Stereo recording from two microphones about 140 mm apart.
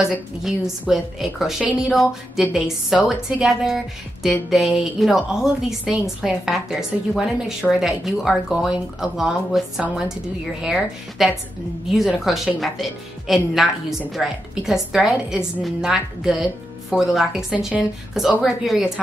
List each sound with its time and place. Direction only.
0.1 s speech: 5° right (ahead or behind)